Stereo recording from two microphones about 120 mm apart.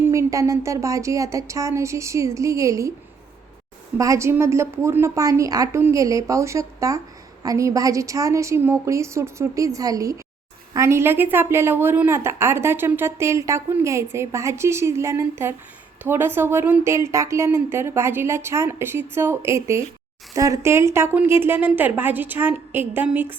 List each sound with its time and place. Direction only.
0.0 s a woman's voice: 25° right (ahead or behind)
3.9 s a woman's voice: 25° right (ahead or behind)